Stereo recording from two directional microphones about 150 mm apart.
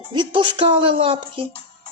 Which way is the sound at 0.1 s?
30° right (ahead or behind).